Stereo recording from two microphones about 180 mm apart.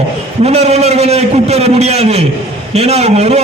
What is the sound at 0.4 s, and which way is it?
A man's voice, 35° right (ahead or behind).